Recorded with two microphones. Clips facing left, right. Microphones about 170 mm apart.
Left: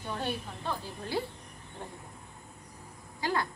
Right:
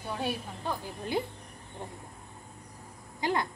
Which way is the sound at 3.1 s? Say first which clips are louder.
Right 2 dB; 20° right (ahead or behind).